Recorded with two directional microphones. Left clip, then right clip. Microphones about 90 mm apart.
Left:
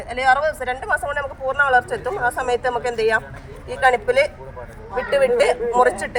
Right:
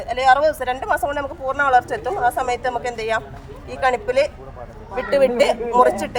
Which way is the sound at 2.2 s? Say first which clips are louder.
Even; 20° right (ahead or behind).